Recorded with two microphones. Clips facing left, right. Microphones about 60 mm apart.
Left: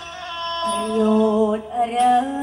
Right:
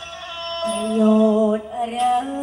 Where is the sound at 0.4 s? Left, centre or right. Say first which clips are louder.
Even; left.